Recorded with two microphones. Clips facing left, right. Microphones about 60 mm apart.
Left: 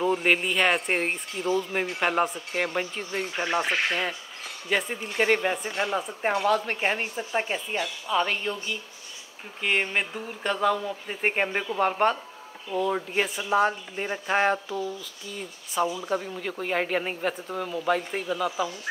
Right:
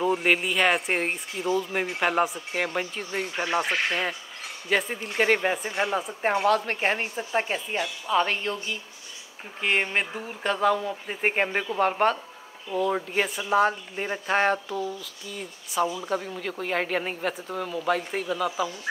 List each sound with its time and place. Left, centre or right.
0.0 s speech: centre
3.3 s speech: right
4.6 s speech: centre
9.6 s speech: centre